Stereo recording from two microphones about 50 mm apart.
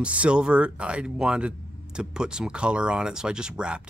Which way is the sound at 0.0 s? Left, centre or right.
Right.